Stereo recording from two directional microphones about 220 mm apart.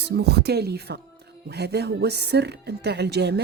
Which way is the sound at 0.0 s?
45° right (ahead or behind).